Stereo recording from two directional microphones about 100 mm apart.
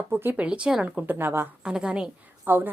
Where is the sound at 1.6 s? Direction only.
10° right (ahead or behind).